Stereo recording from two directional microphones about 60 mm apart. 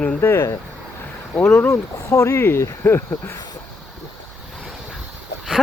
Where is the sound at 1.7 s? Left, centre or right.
Left.